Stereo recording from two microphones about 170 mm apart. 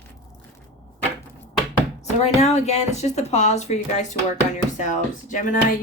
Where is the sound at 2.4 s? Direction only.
40° left (ahead or behind).